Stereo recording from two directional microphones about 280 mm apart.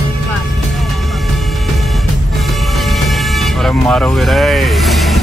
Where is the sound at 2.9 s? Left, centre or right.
Centre.